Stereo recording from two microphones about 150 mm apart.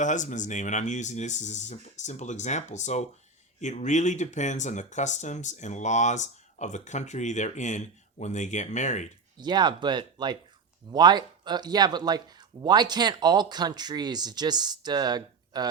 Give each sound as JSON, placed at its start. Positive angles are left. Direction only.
{"t": 0.0, "sound": "speech", "side_deg": 55}
{"t": 9.4, "sound": "speech", "side_deg": -30}